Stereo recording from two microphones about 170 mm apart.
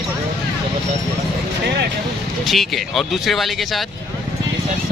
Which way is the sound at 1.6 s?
75° right (ahead or behind).